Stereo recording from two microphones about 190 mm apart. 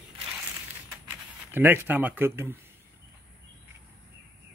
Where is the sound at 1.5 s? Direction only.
10° right (ahead or behind).